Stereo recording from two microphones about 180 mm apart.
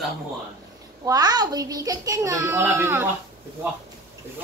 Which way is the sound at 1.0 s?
20° right (ahead or behind).